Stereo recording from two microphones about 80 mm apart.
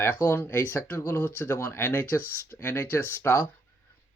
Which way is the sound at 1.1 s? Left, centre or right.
Left.